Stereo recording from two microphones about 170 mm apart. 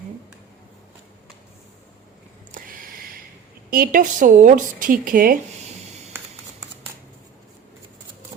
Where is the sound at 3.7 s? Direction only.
55° right (ahead or behind).